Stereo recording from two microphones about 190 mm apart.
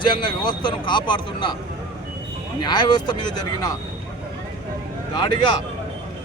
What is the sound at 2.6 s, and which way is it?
Speech, 25° left (ahead or behind).